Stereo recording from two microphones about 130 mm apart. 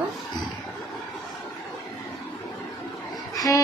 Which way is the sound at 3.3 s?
25° left (ahead or behind).